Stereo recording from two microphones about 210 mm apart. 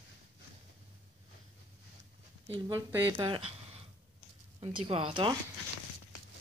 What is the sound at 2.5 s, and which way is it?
Speech, 15° right (ahead or behind).